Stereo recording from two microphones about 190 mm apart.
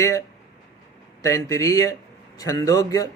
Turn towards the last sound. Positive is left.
turn(degrees=20)  # may be behind; listen again after turning